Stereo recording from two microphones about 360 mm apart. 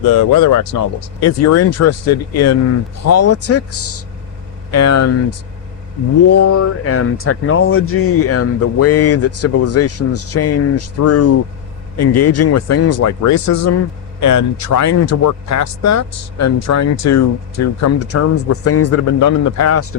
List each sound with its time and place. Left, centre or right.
0.1 s speech: left